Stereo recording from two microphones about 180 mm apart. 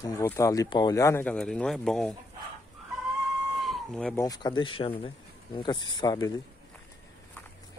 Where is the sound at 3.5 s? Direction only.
Centre (ahead or behind).